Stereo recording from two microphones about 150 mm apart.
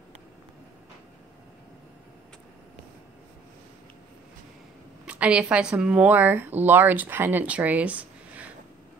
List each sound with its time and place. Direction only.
5.0 s speech: 10° right (ahead or behind)